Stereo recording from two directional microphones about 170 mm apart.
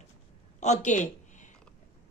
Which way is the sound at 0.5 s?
45° left (ahead or behind).